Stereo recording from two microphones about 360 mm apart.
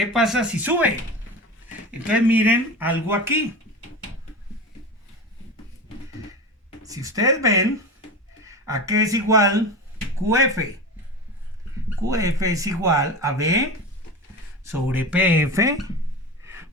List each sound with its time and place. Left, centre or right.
0.1 s speech: centre
1.9 s speech: centre
6.8 s speech: centre
12.0 s speech: centre
14.7 s speech: centre